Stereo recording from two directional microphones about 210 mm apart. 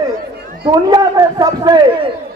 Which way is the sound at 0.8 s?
20° right (ahead or behind).